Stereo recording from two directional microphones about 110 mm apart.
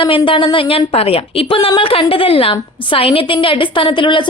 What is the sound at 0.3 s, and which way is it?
A woman's voice, 50° left (ahead or behind).